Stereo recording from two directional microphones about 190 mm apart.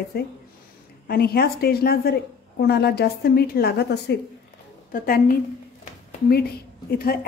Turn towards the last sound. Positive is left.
turn(degrees=50)  # may be behind; listen again after turning